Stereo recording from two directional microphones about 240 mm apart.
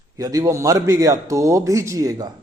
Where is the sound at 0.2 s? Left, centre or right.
Centre.